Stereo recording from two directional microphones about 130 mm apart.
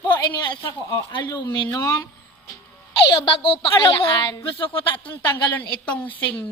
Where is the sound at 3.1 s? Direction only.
40° left (ahead or behind).